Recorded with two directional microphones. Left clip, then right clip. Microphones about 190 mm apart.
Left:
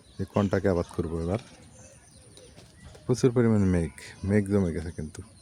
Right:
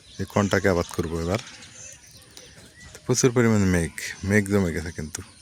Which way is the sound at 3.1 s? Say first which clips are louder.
Right 3 dB; centre (ahead or behind).